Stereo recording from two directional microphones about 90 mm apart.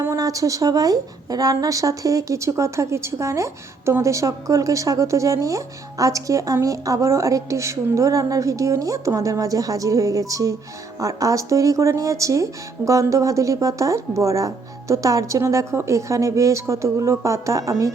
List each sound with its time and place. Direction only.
0.2 s a woman's voice: 40° right (ahead or behind)